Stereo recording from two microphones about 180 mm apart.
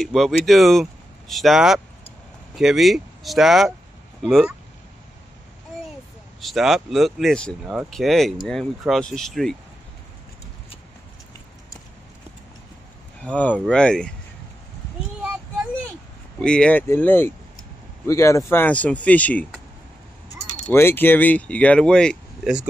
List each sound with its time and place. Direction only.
0.0 s speech: centre (ahead or behind)
6.4 s speech: centre (ahead or behind)
13.2 s speech: 5° left (ahead or behind)
16.3 s speech: 5° left (ahead or behind)
20.7 s speech: 10° left (ahead or behind)